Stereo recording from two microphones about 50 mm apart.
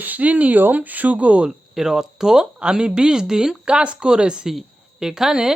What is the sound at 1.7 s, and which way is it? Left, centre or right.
Speech, centre.